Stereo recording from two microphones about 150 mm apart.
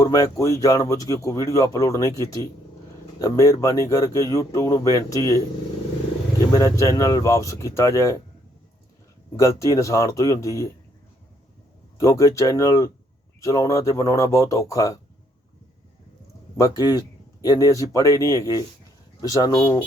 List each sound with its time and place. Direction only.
0.0 s speech: 25° left (ahead or behind)
6.5 s speech: 20° left (ahead or behind)
9.3 s speech: 20° left (ahead or behind)
11.9 s speech: 20° left (ahead or behind)
16.6 s speech: 25° left (ahead or behind)